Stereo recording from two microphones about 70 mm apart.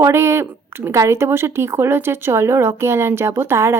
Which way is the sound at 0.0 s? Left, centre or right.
Right.